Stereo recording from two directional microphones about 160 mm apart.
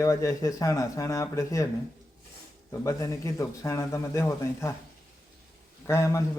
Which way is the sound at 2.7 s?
20° left (ahead or behind).